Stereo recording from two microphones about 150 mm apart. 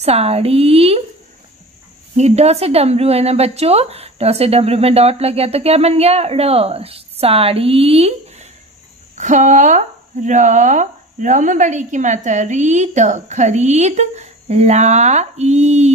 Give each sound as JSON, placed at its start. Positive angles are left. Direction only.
{"t": 0.0, "sound": "a woman's voice", "side_deg": -45}
{"t": 2.1, "sound": "speech", "side_deg": -45}
{"t": 9.1, "sound": "speech", "side_deg": -55}